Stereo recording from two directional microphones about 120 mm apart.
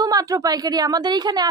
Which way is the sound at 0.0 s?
30° right (ahead or behind).